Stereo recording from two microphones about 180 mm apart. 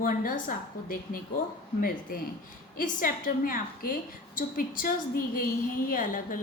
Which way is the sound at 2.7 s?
50° left (ahead or behind).